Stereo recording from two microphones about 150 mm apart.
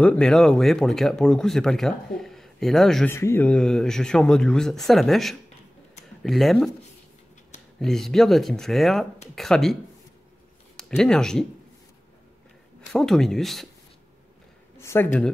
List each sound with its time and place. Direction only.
0.0 s speech: 5° left (ahead or behind)
3.1 s speech: 15° left (ahead or behind)
7.8 s speech: 5° left (ahead or behind)
10.8 s speech: 5° left (ahead or behind)
12.9 s speech: centre (ahead or behind)
14.8 s speech: 15° left (ahead or behind)